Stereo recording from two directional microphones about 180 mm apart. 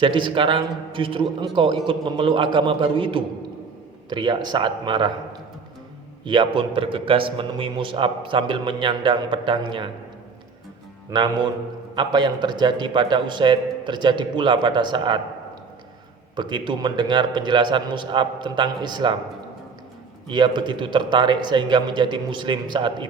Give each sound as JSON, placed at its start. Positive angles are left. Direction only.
{"t": 0.0, "sound": "a man's voice", "side_deg": -25}
{"t": 6.2, "sound": "a man's voice", "side_deg": -25}
{"t": 11.1, "sound": "a man's voice", "side_deg": -25}
{"t": 16.3, "sound": "a man's voice", "side_deg": -25}
{"t": 20.2, "sound": "a man's voice", "side_deg": -25}